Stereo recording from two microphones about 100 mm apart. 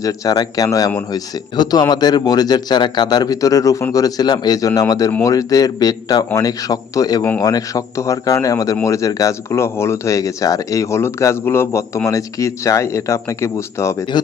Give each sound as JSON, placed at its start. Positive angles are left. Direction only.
{"t": 0.0, "sound": "speech", "side_deg": 40}